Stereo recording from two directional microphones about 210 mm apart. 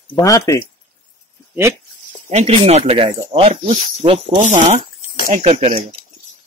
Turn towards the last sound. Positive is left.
turn(degrees=-30)  # may be behind; listen again after turning